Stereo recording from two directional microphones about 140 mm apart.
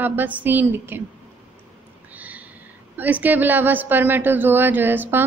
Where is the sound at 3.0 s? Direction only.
10° right (ahead or behind).